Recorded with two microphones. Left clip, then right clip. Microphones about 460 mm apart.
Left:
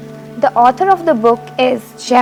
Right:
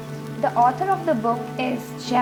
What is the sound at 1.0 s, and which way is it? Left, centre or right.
Speech, left.